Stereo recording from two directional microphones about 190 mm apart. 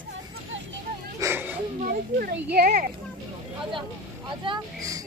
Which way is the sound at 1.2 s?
10° right (ahead or behind).